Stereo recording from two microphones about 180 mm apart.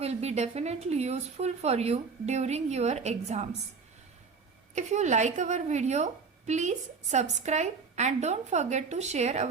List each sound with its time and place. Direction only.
0.0 s speech: 35° right (ahead or behind)
4.7 s speech: 40° right (ahead or behind)